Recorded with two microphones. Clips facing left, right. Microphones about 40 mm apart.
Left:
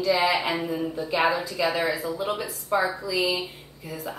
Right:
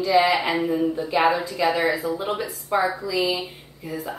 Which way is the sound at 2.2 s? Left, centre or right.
Centre.